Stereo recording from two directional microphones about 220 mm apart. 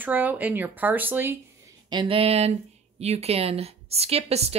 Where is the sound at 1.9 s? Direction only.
25° right (ahead or behind).